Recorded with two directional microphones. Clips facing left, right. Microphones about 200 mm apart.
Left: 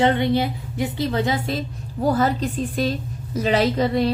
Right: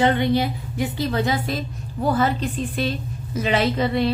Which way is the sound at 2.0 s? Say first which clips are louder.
Left 1 dB; 40° left (ahead or behind).